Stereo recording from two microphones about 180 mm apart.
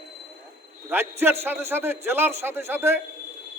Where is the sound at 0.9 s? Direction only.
15° right (ahead or behind).